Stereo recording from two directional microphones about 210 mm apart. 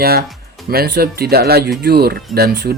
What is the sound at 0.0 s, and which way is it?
Speech, 45° right (ahead or behind).